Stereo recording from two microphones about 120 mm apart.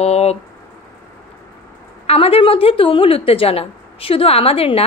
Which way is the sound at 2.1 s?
55° left (ahead or behind).